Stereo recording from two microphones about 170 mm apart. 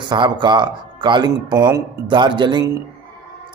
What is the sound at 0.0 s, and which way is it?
Speech, 25° right (ahead or behind).